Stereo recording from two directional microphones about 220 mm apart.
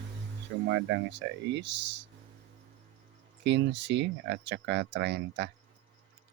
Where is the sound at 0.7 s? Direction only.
55° right (ahead or behind).